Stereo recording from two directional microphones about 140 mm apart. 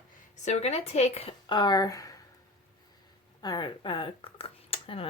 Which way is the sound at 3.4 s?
30° left (ahead or behind).